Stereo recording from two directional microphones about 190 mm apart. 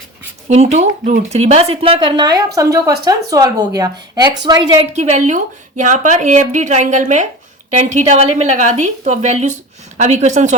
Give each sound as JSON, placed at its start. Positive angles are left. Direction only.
{"t": 0.4, "sound": "speech", "side_deg": -35}
{"t": 4.9, "sound": "speech", "side_deg": -40}